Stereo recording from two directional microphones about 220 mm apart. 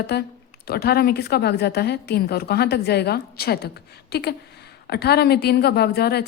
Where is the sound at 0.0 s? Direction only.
45° left (ahead or behind).